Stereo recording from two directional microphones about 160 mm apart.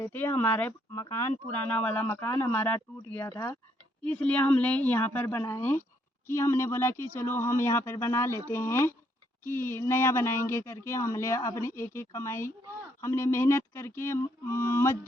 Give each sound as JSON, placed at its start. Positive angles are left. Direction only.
{"t": 0.0, "sound": "speech", "side_deg": 15}